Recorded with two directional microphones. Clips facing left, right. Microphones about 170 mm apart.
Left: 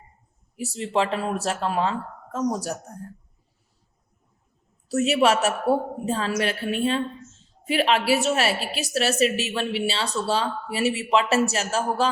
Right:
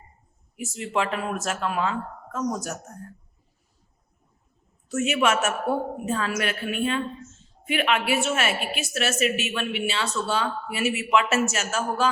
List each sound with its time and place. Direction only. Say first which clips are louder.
0.5 s a woman's voice: left 3 dB; 35° left (ahead or behind)
4.9 s a woman's voice: left 3 dB; 35° left (ahead or behind)